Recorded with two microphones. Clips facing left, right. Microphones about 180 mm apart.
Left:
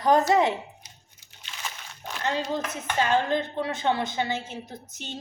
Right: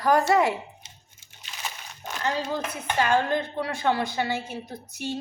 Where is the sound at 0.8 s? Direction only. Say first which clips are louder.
Right 1 dB; 25° right (ahead or behind).